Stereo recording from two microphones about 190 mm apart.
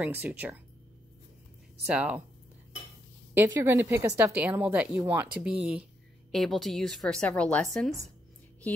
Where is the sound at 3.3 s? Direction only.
10° right (ahead or behind).